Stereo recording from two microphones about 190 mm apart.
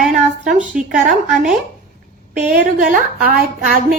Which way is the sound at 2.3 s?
40° right (ahead or behind).